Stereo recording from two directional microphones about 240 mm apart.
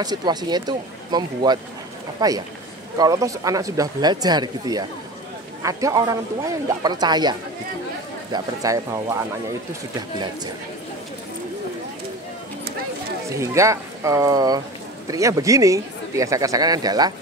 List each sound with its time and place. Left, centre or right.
0.0 s speech: centre
13.4 s speech: centre